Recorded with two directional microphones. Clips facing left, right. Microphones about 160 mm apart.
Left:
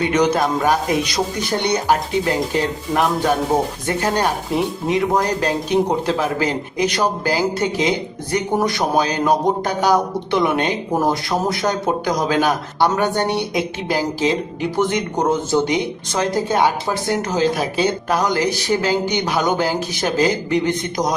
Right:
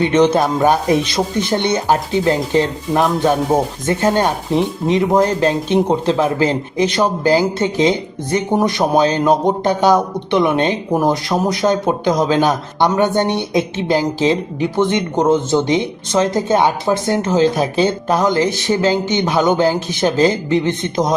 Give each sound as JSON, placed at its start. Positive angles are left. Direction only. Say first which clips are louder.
{"t": 0.0, "sound": "speech", "louder": "right 4 dB", "side_deg": -25}